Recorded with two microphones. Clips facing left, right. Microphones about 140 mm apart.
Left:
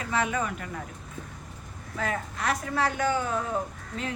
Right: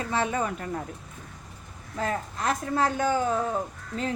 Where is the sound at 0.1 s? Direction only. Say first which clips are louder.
Even; 30° right (ahead or behind).